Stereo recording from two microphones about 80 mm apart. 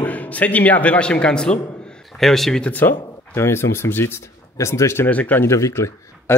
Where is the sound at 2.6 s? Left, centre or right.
Left.